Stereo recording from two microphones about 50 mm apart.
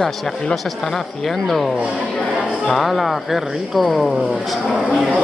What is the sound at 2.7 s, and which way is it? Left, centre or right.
Speech, centre.